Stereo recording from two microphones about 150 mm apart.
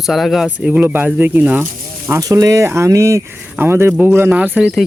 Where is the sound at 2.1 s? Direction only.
20° right (ahead or behind).